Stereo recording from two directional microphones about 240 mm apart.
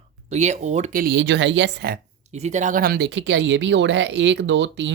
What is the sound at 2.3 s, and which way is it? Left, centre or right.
Speech, right.